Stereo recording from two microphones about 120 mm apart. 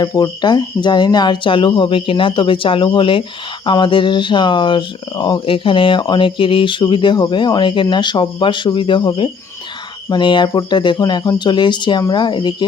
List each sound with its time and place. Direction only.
0.0 s speech: 35° left (ahead or behind)
10.1 s speech: 40° left (ahead or behind)